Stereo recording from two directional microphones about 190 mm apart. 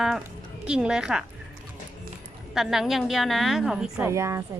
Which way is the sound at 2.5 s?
Centre (ahead or behind).